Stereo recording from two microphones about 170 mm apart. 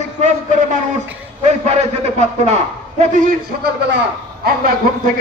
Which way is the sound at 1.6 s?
40° right (ahead or behind).